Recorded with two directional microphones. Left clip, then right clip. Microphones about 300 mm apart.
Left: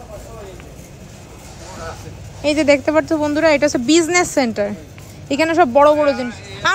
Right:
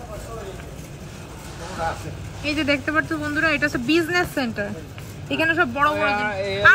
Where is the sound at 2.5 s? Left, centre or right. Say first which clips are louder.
Left 7 dB; centre.